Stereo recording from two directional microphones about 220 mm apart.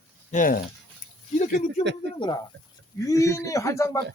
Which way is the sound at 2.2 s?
20° left (ahead or behind).